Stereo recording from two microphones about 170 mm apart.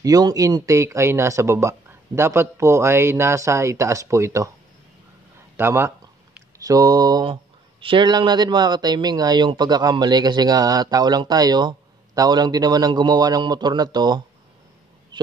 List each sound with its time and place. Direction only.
0.0 s speech: 20° right (ahead or behind)
5.6 s speech: 15° right (ahead or behind)